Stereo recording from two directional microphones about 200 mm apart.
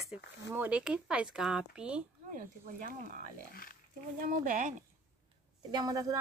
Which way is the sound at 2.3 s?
45° right (ahead or behind).